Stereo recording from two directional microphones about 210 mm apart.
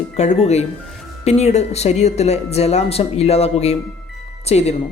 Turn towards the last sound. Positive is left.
turn(degrees=30)  # may be behind; listen again after turning